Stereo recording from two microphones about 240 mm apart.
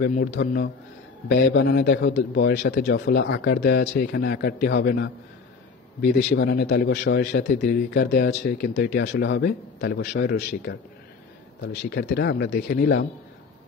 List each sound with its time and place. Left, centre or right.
0.0 s a man's voice: left